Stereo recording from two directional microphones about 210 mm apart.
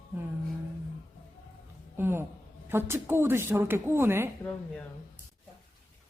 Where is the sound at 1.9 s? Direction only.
10° right (ahead or behind).